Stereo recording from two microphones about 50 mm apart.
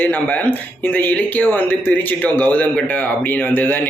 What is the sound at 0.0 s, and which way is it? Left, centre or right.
Speech, left.